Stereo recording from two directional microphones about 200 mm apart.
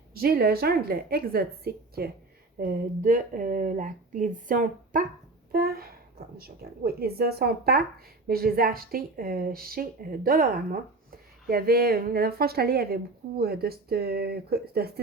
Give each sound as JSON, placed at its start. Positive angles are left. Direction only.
{"t": 0.1, "sound": "a woman's voice", "side_deg": -50}